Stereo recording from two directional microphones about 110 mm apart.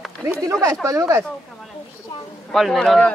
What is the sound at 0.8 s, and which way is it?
Speech, 30° right (ahead or behind).